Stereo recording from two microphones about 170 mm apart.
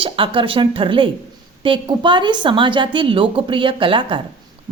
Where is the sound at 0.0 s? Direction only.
30° right (ahead or behind).